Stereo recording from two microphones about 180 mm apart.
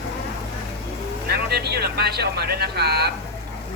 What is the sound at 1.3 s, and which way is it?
Speech, 60° right (ahead or behind).